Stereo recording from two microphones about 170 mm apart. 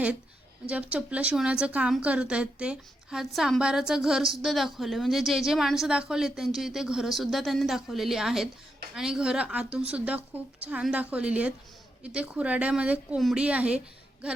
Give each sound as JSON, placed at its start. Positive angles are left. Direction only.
{"t": 0.7, "sound": "a woman's voice", "side_deg": -5}